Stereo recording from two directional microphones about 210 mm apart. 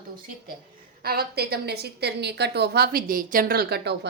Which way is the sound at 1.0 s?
45° right (ahead or behind).